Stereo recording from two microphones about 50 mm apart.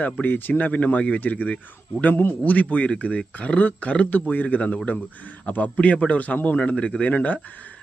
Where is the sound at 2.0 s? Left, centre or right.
Left.